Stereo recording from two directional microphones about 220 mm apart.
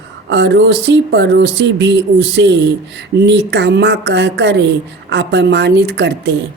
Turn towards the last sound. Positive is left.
turn(degrees=-50)  # may be behind; listen again after turning